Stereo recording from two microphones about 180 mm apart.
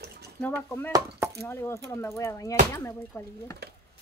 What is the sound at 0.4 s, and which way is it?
Speech, 10° left (ahead or behind).